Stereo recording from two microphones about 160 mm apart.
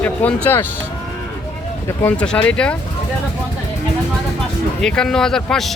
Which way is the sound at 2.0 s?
10° left (ahead or behind).